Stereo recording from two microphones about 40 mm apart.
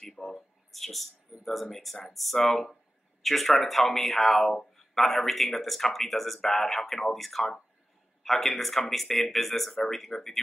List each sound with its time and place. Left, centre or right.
0.1 s speech: centre